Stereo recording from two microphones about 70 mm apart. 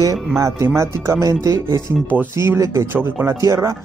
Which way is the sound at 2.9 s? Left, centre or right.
Right.